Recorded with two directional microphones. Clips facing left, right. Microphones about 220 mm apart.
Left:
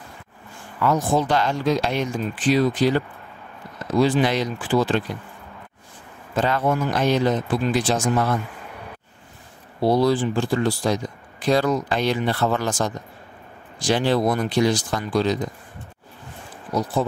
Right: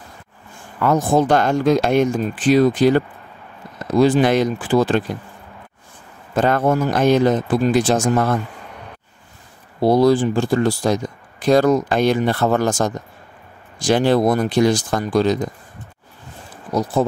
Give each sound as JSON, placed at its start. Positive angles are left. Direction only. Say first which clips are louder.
{"t": 0.7, "sound": "speech", "louder": "right 4 dB", "side_deg": -50}
{"t": 4.0, "sound": "speech", "louder": "right 5 dB", "side_deg": -50}
{"t": 6.3, "sound": "speech", "louder": "right 5 dB", "side_deg": -50}
{"t": 9.8, "sound": "speech", "louder": "right 5 dB", "side_deg": -45}